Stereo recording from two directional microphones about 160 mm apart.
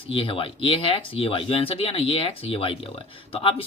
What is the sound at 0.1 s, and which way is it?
Speech, 35° left (ahead or behind).